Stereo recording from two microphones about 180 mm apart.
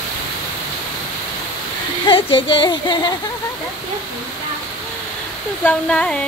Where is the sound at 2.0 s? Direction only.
30° left (ahead or behind).